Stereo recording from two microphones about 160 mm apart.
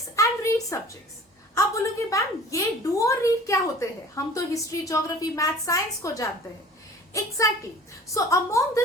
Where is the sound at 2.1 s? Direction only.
20° left (ahead or behind).